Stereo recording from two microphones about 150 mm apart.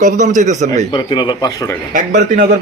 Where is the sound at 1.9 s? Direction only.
60° right (ahead or behind).